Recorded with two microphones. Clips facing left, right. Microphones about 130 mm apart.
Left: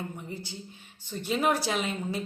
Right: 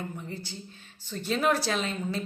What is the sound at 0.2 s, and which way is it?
A woman's voice, 15° left (ahead or behind).